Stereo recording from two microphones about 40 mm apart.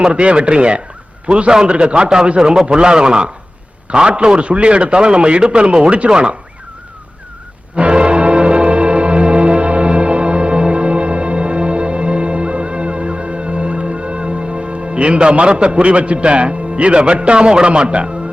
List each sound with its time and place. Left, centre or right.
0.0 s a man's voice: right
7.8 s music: right